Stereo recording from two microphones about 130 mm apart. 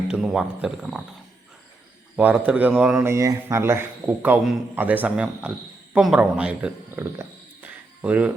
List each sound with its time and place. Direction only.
0.1 s speech: 5° right (ahead or behind)
2.1 s a man's voice: 10° right (ahead or behind)
3.1 s a man's voice: 25° right (ahead or behind)